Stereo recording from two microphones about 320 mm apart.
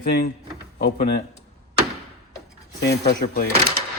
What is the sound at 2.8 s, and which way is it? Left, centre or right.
Speech, left.